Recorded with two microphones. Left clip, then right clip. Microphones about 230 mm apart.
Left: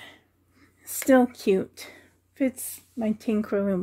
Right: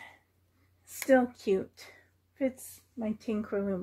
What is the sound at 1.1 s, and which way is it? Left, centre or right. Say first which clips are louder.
Speech: left 5 dB; left.